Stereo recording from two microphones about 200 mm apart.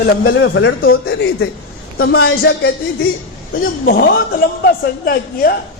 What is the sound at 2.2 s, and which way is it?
Speech, 55° left (ahead or behind).